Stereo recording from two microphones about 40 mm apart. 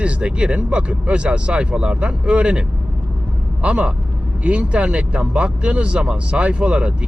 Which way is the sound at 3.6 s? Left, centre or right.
Right.